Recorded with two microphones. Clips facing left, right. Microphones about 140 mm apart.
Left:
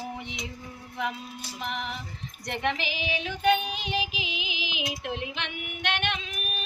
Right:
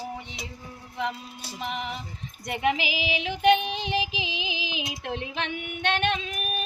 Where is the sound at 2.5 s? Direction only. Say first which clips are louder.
Right 4 dB; 5° right (ahead or behind).